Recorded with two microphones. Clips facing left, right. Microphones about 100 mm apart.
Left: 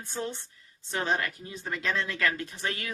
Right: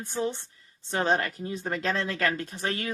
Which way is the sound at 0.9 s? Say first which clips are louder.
Right 4 dB; 35° right (ahead or behind).